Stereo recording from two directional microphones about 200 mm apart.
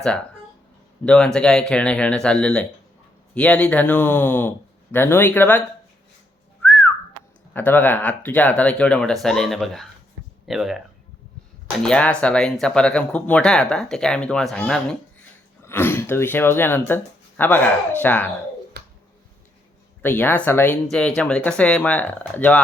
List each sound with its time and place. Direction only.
1.0 s speech: 5° left (ahead or behind)
6.6 s whistling: 10° left (ahead or behind)
7.5 s speech: 10° left (ahead or behind)
18.8 s a sound: 55° right (ahead or behind)
20.0 s speech: 10° left (ahead or behind)